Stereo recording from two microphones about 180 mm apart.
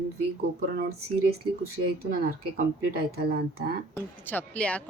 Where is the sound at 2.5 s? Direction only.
55° right (ahead or behind).